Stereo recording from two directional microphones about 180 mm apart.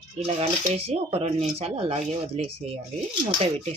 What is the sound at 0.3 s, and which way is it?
Speech, 35° right (ahead or behind).